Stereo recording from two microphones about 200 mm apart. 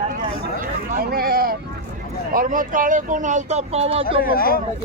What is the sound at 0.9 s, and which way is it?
Speech, 45° right (ahead or behind).